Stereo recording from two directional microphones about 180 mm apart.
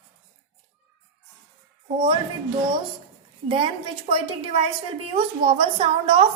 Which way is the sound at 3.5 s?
30° right (ahead or behind).